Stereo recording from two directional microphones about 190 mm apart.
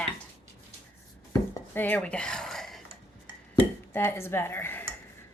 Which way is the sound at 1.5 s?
10° left (ahead or behind).